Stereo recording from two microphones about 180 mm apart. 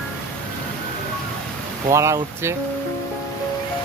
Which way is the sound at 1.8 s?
15° right (ahead or behind).